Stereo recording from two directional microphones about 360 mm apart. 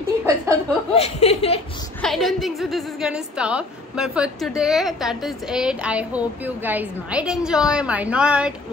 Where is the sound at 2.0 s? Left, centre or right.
Centre.